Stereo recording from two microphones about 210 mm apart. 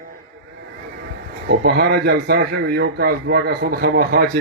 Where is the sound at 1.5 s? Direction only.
50° right (ahead or behind).